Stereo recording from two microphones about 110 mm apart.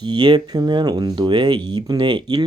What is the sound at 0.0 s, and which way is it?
Speech, 40° right (ahead or behind).